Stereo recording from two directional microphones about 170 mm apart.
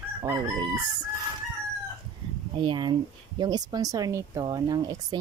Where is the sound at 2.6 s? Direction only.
30° right (ahead or behind).